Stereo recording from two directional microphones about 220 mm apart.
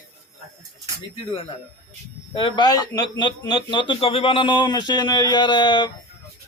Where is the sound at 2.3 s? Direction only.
20° left (ahead or behind).